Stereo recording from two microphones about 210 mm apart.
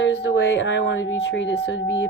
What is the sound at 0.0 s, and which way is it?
Speech, 60° left (ahead or behind).